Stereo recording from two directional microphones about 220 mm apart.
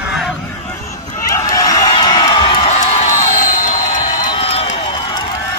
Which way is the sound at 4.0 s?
20° left (ahead or behind).